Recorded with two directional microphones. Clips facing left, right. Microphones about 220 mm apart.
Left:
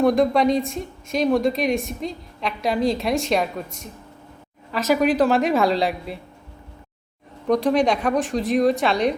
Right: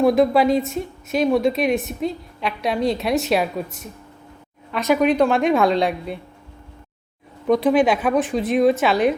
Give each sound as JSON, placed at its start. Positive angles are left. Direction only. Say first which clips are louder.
{"t": 0.0, "sound": "speech", "louder": "right 2 dB", "side_deg": 0}
{"t": 7.4, "sound": "speech", "louder": "right 2 dB", "side_deg": 0}